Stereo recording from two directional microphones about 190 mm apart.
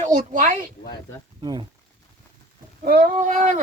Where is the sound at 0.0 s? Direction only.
40° right (ahead or behind).